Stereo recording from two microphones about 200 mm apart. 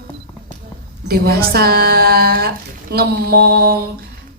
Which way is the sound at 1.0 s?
50° right (ahead or behind).